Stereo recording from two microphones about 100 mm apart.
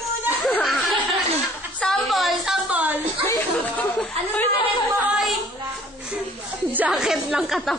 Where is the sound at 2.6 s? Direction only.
15° right (ahead or behind).